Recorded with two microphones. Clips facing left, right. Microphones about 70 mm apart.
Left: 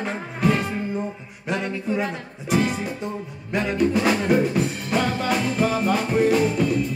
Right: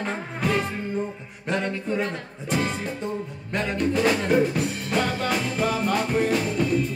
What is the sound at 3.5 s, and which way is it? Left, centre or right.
Music, centre.